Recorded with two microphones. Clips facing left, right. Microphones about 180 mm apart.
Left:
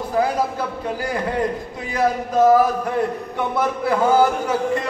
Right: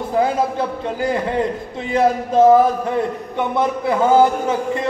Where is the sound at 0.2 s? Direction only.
25° right (ahead or behind).